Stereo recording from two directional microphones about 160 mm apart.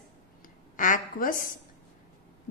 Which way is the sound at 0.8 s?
55° left (ahead or behind).